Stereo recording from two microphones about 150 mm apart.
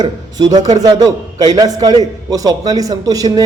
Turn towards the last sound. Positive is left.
turn(degrees=-25)  # may be behind; listen again after turning